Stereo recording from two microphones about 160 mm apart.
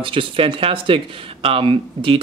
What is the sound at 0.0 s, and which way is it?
Speech, 35° right (ahead or behind).